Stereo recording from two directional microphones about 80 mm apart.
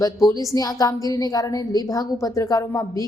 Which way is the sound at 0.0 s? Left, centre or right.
Left.